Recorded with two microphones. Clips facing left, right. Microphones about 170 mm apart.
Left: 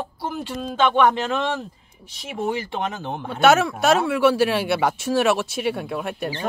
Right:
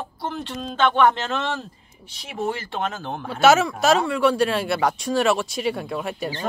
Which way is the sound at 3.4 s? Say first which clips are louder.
Even; centre (ahead or behind).